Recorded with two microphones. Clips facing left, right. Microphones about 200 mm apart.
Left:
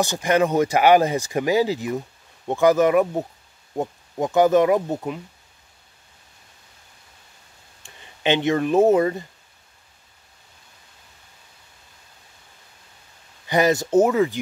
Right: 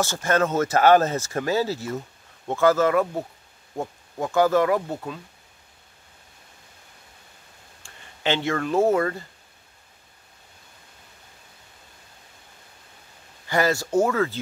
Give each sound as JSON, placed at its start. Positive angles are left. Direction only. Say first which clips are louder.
{"t": 0.0, "sound": "speech", "louder": "left 3 dB", "side_deg": 15}
{"t": 7.8, "sound": "speech", "louder": "left 3 dB", "side_deg": 20}
{"t": 13.5, "sound": "speech", "louder": "left 4 dB", "side_deg": 20}